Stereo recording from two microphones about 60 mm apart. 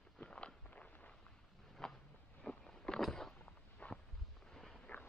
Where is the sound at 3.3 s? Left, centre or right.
Centre.